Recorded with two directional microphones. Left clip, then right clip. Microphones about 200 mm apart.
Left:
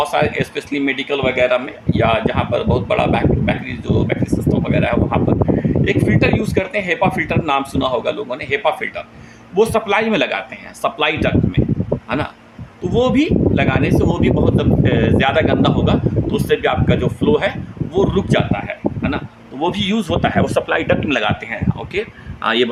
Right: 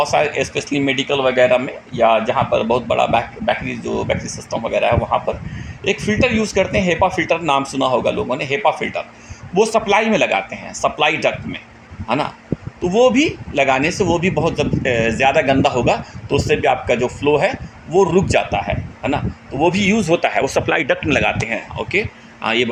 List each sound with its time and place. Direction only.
0.1 s speech: 5° right (ahead or behind)
4.7 s speech: 10° right (ahead or behind)
22.4 s speech: centre (ahead or behind)